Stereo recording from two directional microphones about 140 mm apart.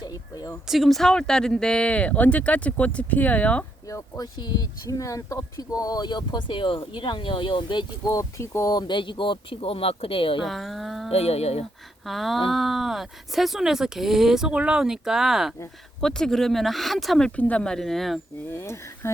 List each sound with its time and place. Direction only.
0.0 s speech: 25° left (ahead or behind)
0.7 s speech: centre (ahead or behind)
3.8 s speech: 25° left (ahead or behind); by 10.4 s 40° left (ahead or behind)
10.4 s speech: centre (ahead or behind)
11.1 s speech: 45° left (ahead or behind)
12.0 s speech: centre (ahead or behind)
18.5 s speech: 20° left (ahead or behind)